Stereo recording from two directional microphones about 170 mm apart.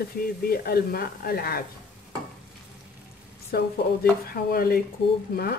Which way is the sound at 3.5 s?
65° left (ahead or behind).